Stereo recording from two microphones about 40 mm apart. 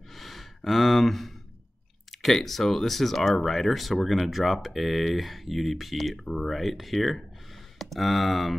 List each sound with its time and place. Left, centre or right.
0.1 s gasp: centre
0.7 s speech: centre